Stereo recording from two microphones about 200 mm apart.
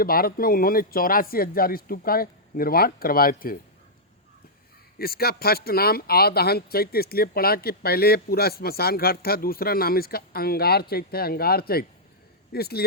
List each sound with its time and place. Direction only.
0.0 s speech: 50° left (ahead or behind)
4.9 s speech: 50° left (ahead or behind)